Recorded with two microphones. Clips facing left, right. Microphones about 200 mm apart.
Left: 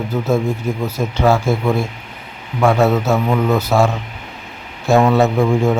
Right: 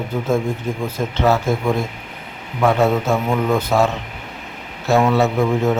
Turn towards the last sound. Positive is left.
turn(degrees=15)  # may be behind; listen again after turning